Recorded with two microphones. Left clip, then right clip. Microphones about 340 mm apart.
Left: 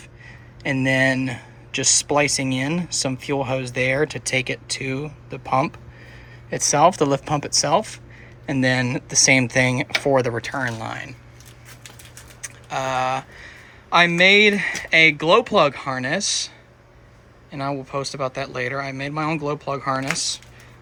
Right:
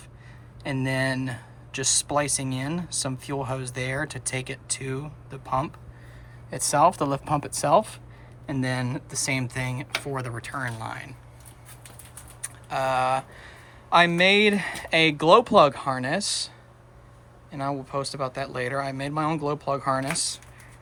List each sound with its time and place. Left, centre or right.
0.6 s speech: centre
12.4 s speech: centre
17.5 s speech: centre